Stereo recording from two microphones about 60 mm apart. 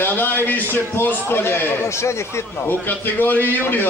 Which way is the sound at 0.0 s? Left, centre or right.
Left.